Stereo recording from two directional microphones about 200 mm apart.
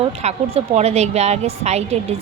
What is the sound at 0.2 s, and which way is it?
A woman's voice, 30° right (ahead or behind).